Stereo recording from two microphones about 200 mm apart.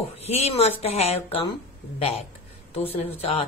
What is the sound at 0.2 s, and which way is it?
A man's voice, 30° left (ahead or behind).